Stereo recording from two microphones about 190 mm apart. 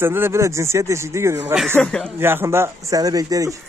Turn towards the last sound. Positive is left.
turn(degrees=-20)  # may be behind; listen again after turning